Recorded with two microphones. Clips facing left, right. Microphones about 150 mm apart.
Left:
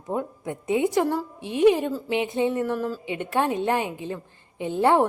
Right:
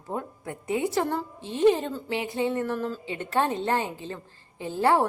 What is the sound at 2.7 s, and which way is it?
A woman's voice, 5° left (ahead or behind).